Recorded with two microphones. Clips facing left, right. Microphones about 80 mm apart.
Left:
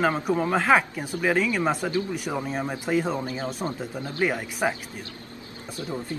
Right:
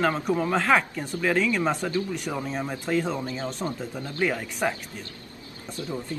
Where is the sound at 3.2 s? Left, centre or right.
Left.